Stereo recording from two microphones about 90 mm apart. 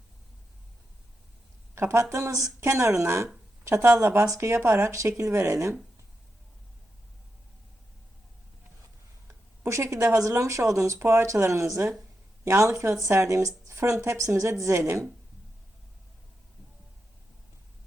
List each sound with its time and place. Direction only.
1.7 s speech: 30° right (ahead or behind)
9.2 s speech: 30° right (ahead or behind)